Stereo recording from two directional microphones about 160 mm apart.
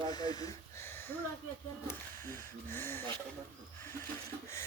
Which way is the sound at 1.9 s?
15° left (ahead or behind).